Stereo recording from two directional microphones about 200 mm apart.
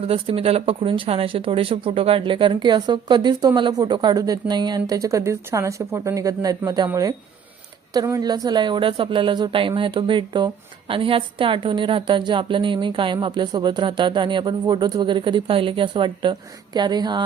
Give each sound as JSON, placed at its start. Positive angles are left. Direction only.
{"t": 0.1, "sound": "a woman's voice", "side_deg": -30}